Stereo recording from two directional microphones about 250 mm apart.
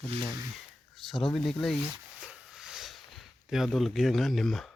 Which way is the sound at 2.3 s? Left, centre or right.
Centre.